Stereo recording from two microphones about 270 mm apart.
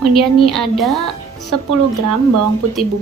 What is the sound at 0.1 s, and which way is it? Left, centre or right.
A woman's voice, centre.